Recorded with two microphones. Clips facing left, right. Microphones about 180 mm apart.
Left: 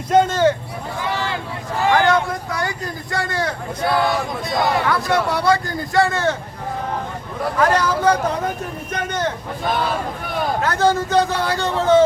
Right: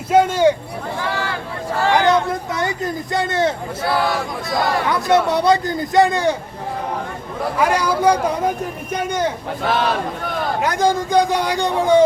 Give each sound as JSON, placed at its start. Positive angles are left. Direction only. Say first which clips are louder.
{"t": 0.1, "sound": "speech", "louder": "right 1 dB", "side_deg": -10}
{"t": 1.9, "sound": "speech", "louder": "right 1 dB", "side_deg": -20}
{"t": 4.9, "sound": "speech", "louder": "right 3 dB", "side_deg": -20}
{"t": 7.6, "sound": "speech", "louder": "even", "side_deg": -10}
{"t": 9.6, "sound": "speech", "louder": "right 2 dB", "side_deg": -80}
{"t": 10.6, "sound": "speech", "louder": "even", "side_deg": -15}